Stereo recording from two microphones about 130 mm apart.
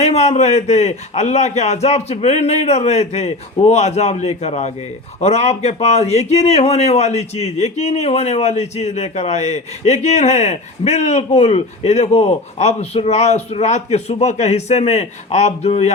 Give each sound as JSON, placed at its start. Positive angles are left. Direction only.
{"t": 0.0, "sound": "a man's voice", "side_deg": 55}